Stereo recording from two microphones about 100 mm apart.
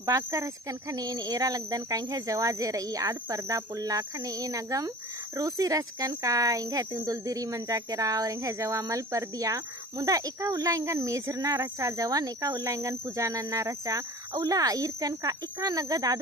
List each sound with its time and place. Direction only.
0.0 s speech: 30° right (ahead or behind)